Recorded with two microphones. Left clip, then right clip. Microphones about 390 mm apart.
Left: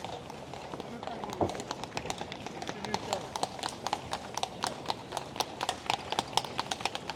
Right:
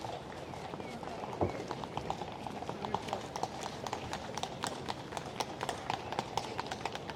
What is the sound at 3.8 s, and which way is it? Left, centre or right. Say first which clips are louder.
Clip-clop: left 5 dB; left.